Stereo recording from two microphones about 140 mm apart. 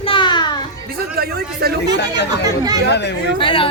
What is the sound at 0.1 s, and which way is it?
Children playing, 35° left (ahead or behind).